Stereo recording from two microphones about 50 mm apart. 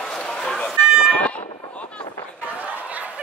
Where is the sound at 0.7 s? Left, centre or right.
Left.